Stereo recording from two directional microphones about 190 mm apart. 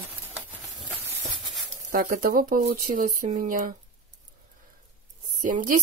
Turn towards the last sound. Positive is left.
turn(degrees=-45)  # may be behind; listen again after turning